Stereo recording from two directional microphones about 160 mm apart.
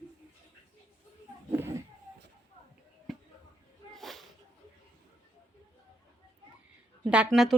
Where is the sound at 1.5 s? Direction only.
15° right (ahead or behind).